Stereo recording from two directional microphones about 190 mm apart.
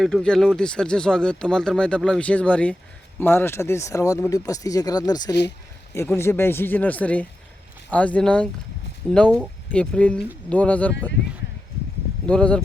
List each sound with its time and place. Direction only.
0.0 s speech: centre (ahead or behind)
12.2 s speech: 5° left (ahead or behind)